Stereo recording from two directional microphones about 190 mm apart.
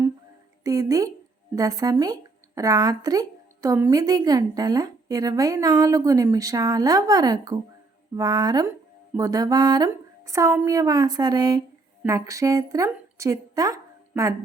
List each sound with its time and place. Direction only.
0.6 s a woman's voice: 15° right (ahead or behind)